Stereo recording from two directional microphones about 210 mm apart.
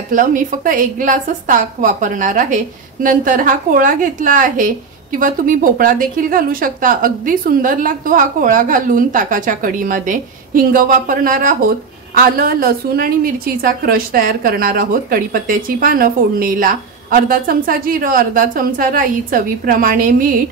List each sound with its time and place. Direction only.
0.1 s a woman's voice: 40° right (ahead or behind)